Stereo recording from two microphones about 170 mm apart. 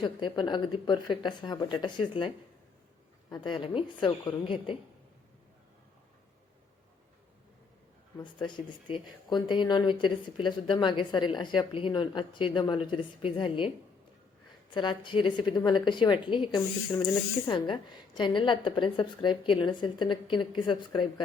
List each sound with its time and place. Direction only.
0.0 s speech: 25° left (ahead or behind)
8.2 s speech: 25° left (ahead or behind)
14.7 s speech: 30° left (ahead or behind)